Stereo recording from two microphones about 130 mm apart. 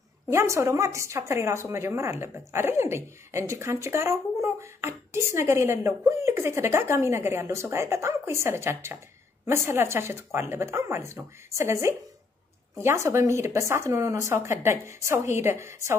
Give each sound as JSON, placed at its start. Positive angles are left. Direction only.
{"t": 0.3, "sound": "speech", "side_deg": -20}